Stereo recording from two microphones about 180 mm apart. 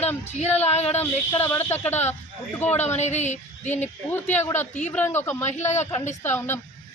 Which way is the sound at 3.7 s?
10° left (ahead or behind).